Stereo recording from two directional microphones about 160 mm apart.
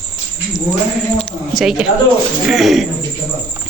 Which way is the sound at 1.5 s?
5° right (ahead or behind).